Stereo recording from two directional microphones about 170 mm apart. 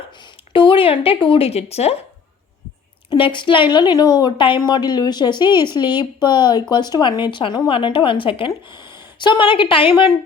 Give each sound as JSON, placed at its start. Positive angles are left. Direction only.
{"t": 0.5, "sound": "speech", "side_deg": 30}
{"t": 3.1, "sound": "speech", "side_deg": 30}